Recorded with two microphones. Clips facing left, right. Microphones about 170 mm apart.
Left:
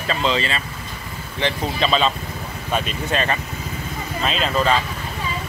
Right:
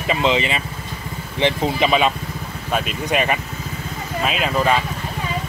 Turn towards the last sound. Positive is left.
turn(degrees=-10)  # may be behind; listen again after turning